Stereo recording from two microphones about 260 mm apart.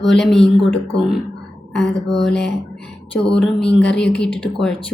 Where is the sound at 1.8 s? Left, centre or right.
Centre.